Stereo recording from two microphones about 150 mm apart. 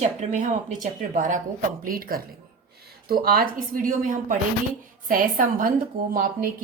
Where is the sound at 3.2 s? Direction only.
80° right.